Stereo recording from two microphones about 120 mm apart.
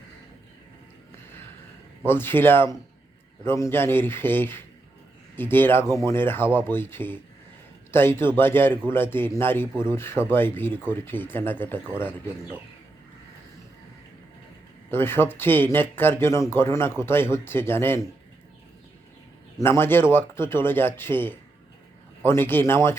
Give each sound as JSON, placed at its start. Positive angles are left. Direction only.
{"t": 2.0, "sound": "a man's voice", "side_deg": 20}
{"t": 14.8, "sound": "speech", "side_deg": 20}
{"t": 19.5, "sound": "speech", "side_deg": 20}